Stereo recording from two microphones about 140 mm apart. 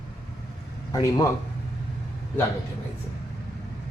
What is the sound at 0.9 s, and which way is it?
Speech, 25° left (ahead or behind).